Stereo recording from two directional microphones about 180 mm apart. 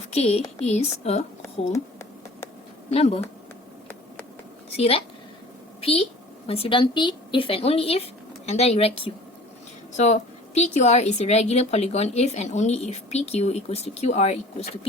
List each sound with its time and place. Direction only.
0.1 s a woman's voice: 35° left (ahead or behind)
2.9 s a woman's voice: 35° left (ahead or behind)
4.8 s a woman's voice: 30° left (ahead or behind)